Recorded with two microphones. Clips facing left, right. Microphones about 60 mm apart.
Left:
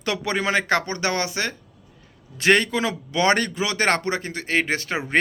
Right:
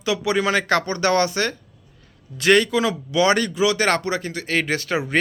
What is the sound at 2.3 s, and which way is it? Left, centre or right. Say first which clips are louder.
A man's voice: right 2 dB; left.